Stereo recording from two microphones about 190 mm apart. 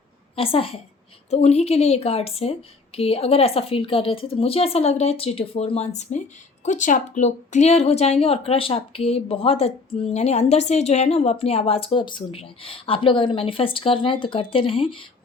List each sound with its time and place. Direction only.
0.3 s a woman's voice: 30° left (ahead or behind)